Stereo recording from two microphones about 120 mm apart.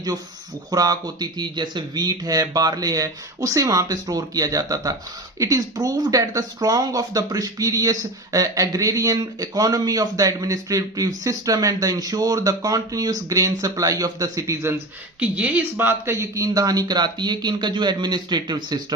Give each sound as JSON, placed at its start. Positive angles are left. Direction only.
{"t": 0.7, "sound": "speech", "side_deg": -30}
{"t": 15.2, "sound": "speech", "side_deg": -10}